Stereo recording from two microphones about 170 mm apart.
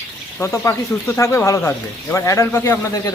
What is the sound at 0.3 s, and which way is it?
Speech, 15° left (ahead or behind).